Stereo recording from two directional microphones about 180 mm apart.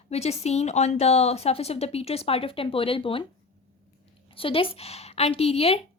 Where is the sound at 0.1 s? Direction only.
35° left (ahead or behind).